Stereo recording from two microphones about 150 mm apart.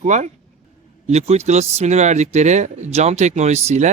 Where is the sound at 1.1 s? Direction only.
45° right (ahead or behind).